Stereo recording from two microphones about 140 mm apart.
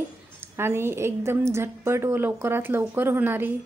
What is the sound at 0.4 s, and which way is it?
A woman's voice, 15° right (ahead or behind).